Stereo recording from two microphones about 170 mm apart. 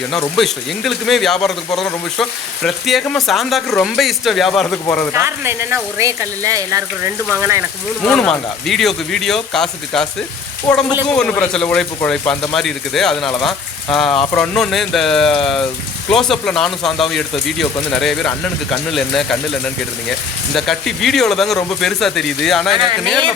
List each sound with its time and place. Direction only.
0.3 s speech: centre (ahead or behind)
5.2 s speech: 15° right (ahead or behind)
8.0 s speech: centre (ahead or behind)
11.1 s speech: 5° left (ahead or behind)